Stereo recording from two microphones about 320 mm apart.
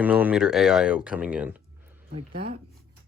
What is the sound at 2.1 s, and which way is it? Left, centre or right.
Speech, right.